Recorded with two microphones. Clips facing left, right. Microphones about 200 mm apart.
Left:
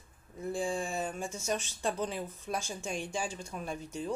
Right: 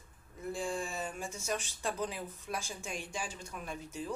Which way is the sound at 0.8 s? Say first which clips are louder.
Left 4 dB; 50° left (ahead or behind).